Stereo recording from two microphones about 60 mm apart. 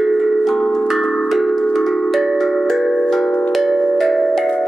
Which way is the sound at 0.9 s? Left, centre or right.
Centre.